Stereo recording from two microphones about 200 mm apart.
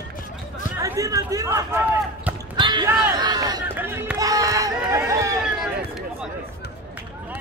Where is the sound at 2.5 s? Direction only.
20° right (ahead or behind).